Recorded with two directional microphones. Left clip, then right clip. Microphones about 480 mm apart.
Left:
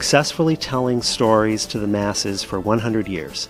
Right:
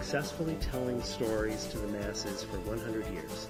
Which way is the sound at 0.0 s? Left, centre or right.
Left.